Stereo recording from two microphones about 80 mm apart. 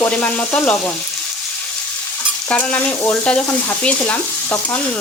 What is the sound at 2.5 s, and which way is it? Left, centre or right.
Stir, centre.